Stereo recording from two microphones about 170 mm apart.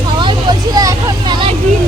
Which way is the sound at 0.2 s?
25° right (ahead or behind).